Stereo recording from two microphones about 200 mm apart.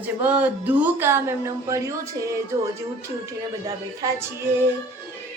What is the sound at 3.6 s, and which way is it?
Speech, 15° right (ahead or behind).